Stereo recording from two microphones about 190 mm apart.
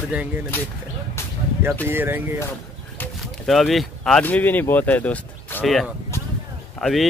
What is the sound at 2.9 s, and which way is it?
A man's voice, centre (ahead or behind).